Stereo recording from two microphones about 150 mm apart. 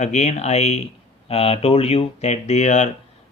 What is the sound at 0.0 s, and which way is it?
Speech, 50° left (ahead or behind).